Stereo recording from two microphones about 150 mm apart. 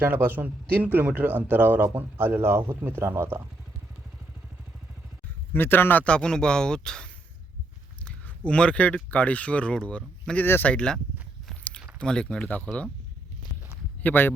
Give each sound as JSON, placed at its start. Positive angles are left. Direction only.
{"t": 0.0, "sound": "speech", "side_deg": -15}
{"t": 5.5, "sound": "a man's voice", "side_deg": 15}
{"t": 8.0, "sound": "a sound", "side_deg": 5}
{"t": 9.0, "sound": "speech", "side_deg": 10}
{"t": 11.4, "sound": "biting", "side_deg": 5}
{"t": 11.9, "sound": "a man's voice", "side_deg": 5}
{"t": 14.0, "sound": "speech", "side_deg": 15}